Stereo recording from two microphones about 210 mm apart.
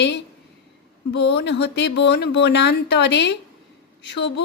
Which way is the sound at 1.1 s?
55° left (ahead or behind).